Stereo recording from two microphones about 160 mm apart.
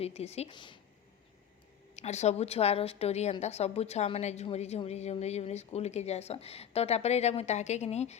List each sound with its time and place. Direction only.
0.0 s a woman's voice: 40° left (ahead or behind)
0.5 s a woman's voice: 30° left (ahead or behind)
2.0 s a woman's voice: 45° left (ahead or behind)